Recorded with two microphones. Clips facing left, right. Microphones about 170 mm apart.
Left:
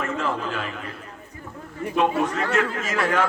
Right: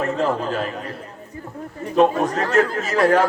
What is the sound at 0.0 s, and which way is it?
Speech, 40° right (ahead or behind).